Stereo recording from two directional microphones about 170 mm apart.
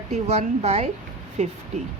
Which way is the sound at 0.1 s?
40° right (ahead or behind).